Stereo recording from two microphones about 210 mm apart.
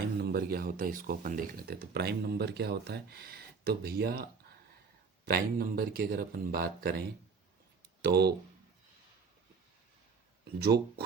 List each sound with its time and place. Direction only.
0.2 s speech: 50° right (ahead or behind)
8.0 s speech: 50° right (ahead or behind)
10.4 s speech: 50° right (ahead or behind)